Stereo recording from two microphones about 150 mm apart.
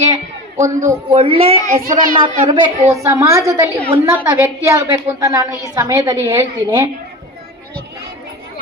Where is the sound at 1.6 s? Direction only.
60° right (ahead or behind).